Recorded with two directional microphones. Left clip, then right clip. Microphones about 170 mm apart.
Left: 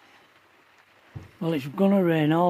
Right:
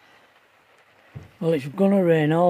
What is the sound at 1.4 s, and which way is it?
Speech, 10° right (ahead or behind).